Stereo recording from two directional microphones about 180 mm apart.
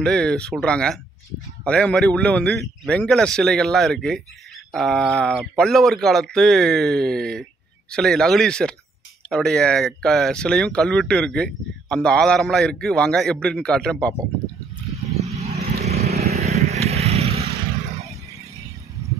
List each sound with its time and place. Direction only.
0.0 s speech: 5° left (ahead or behind)
15.2 s vehicle: 35° right (ahead or behind)